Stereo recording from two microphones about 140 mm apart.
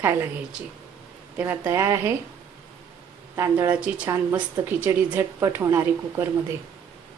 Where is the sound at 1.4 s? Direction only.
15° right (ahead or behind).